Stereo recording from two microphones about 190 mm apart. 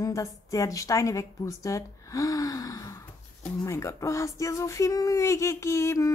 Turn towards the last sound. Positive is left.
turn(degrees=15)  # may be behind; listen again after turning